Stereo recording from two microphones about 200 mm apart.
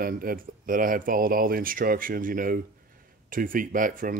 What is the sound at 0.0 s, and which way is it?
Speech, 45° right (ahead or behind).